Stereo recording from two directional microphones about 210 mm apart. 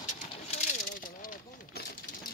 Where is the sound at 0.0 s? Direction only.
35° left (ahead or behind).